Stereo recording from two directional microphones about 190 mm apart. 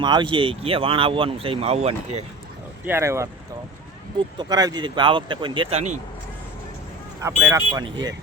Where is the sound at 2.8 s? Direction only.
15° right (ahead or behind); by 5.9 s 35° right (ahead or behind).